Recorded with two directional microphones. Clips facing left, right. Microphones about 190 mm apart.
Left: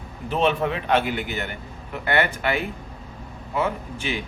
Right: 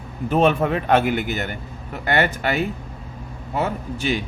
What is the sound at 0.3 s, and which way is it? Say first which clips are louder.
A man's voice: right 4 dB; 50° right (ahead or behind).